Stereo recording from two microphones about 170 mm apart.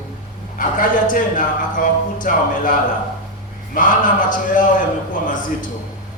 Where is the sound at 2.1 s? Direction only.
50° left (ahead or behind).